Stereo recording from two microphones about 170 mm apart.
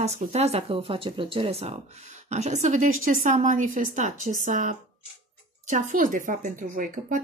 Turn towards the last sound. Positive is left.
turn(degrees=-50)  # may be behind; listen again after turning